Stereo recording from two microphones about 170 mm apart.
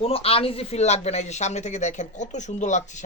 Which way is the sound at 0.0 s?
35° left (ahead or behind).